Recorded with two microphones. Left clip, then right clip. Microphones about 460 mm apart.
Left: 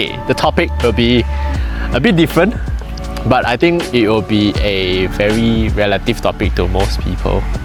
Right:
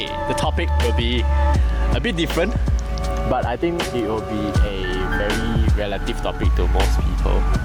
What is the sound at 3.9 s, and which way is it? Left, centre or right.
Speech, left.